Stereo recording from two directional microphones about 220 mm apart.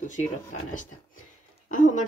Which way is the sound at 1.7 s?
35° left (ahead or behind).